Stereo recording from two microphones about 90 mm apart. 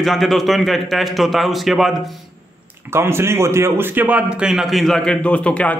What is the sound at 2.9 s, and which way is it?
A man's voice, 30° right (ahead or behind).